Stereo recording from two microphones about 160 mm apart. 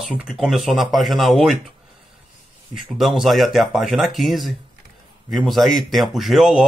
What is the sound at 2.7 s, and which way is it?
Speech, centre (ahead or behind).